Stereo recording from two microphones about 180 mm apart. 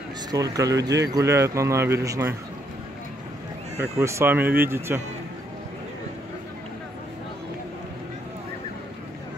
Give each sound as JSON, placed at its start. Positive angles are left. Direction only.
{"t": 0.3, "sound": "speech", "side_deg": -20}
{"t": 4.0, "sound": "speech", "side_deg": -15}